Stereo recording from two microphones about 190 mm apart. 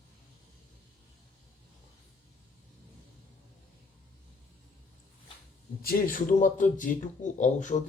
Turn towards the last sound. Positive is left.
turn(degrees=40)  # may be behind; listen again after turning